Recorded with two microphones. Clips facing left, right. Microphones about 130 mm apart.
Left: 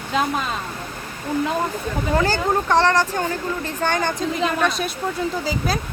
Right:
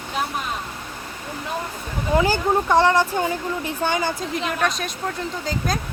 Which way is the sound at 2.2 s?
10° right (ahead or behind).